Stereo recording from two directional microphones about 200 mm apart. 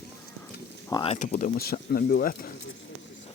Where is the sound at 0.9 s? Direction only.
25° left (ahead or behind).